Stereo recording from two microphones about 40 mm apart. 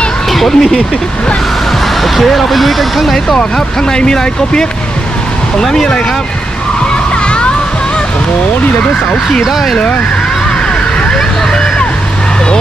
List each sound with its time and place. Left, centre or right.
0.3 s speech: centre
2.2 s speech: centre
3.5 s speech: centre